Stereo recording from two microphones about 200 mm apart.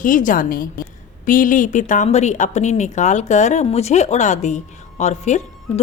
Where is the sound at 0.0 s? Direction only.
40° left (ahead or behind).